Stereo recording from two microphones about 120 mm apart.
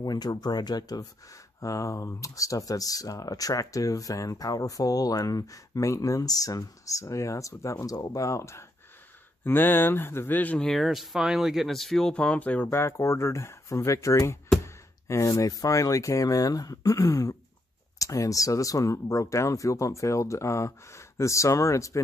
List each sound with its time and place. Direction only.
0.0 s speech: 35° left (ahead or behind); by 12.6 s 10° left (ahead or behind)
12.6 s speech: 25° left (ahead or behind)